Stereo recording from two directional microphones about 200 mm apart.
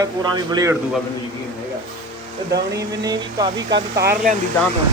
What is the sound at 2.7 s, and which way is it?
Speech, 20° right (ahead or behind).